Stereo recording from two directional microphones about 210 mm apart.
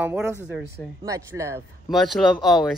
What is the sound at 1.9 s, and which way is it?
Speech, centre (ahead or behind).